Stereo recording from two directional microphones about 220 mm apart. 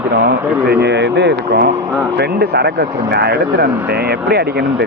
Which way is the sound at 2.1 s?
50° right (ahead or behind).